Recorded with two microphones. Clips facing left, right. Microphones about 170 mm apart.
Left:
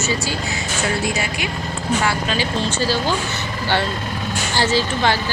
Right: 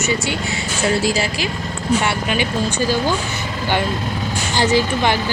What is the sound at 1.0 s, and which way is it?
Speech, 30° right (ahead or behind).